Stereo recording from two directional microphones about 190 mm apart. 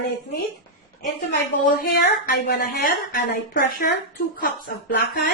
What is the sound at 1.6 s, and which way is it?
A woman's voice, 50° left (ahead or behind).